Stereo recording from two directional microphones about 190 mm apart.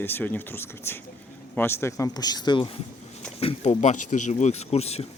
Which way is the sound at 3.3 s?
35° left (ahead or behind).